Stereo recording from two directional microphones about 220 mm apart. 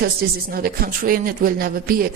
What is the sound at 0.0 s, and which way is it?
A woman's voice, 45° right (ahead or behind).